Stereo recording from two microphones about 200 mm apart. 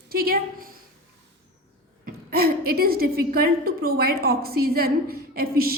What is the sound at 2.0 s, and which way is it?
A woman's voice, 50° right (ahead or behind).